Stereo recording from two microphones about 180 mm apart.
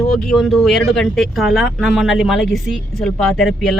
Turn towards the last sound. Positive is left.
turn(degrees=0)  # may be behind; listen again after turning